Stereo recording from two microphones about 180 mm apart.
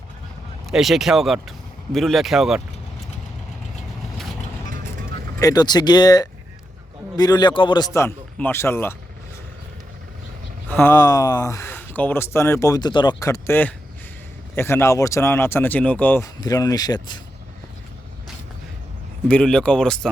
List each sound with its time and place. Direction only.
0.7 s speech: centre (ahead or behind)
5.4 s speech: 20° left (ahead or behind)
7.9 s speech: 10° left (ahead or behind)
10.7 s speech: 10° left (ahead or behind)
19.3 s speech: 5° left (ahead or behind)